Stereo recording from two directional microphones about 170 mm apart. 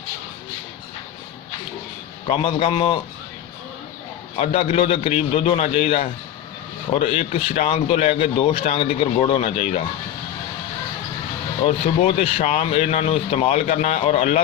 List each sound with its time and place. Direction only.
2.2 s speech: 30° left (ahead or behind)
4.4 s speech: 35° left (ahead or behind)
11.6 s speech: 35° left (ahead or behind)